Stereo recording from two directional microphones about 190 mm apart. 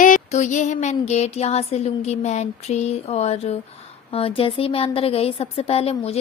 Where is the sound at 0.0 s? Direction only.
40° left (ahead or behind).